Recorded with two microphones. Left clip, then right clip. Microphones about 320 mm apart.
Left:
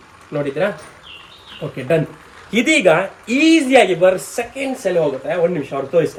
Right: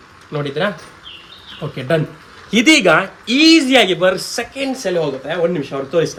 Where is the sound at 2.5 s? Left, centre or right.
Right.